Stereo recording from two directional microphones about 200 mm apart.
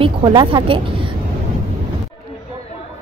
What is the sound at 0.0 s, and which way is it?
A woman's voice, 20° right (ahead or behind).